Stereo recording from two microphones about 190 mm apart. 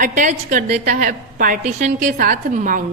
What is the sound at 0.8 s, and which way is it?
A woman's voice, 50° right (ahead or behind).